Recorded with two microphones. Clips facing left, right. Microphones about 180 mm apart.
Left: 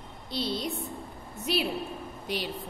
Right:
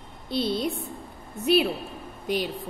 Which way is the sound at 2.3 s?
50° right (ahead or behind).